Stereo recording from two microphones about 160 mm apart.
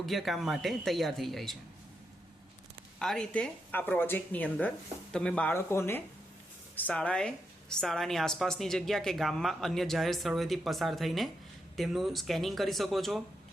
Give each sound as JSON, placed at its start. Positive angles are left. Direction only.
{"t": 0.0, "sound": "a woman's voice", "side_deg": 0}
{"t": 3.0, "sound": "a woman's voice", "side_deg": 5}